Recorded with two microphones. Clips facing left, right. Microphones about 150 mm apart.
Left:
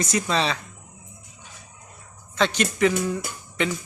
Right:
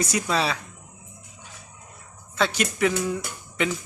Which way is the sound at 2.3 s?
5° right (ahead or behind).